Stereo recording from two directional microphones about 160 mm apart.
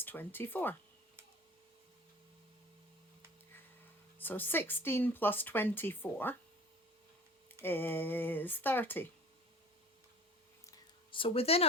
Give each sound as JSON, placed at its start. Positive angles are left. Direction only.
{"t": 0.0, "sound": "speech", "side_deg": 10}
{"t": 4.2, "sound": "speech", "side_deg": 10}
{"t": 7.6, "sound": "speech", "side_deg": 15}
{"t": 11.1, "sound": "speech", "side_deg": 35}